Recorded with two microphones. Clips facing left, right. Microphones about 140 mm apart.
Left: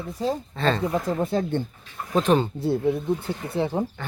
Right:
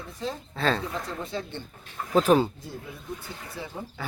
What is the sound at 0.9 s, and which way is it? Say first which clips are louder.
Speech: left 9 dB; 50° left (ahead or behind).